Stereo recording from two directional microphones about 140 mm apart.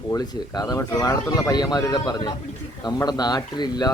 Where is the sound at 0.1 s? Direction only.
25° left (ahead or behind).